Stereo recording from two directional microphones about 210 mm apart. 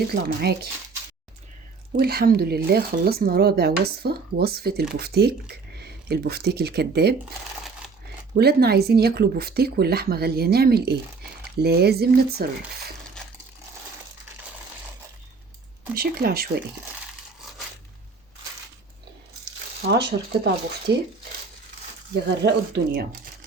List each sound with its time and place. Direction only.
0.1 s speech: 50° right (ahead or behind)
2.0 s speech: 45° right (ahead or behind)
8.4 s speech: 50° right (ahead or behind)
13.2 s a sound: 5° left (ahead or behind)
16.0 s speech: 45° right (ahead or behind)
19.9 s speech: 50° right (ahead or behind)
22.4 s speech: 50° right (ahead or behind)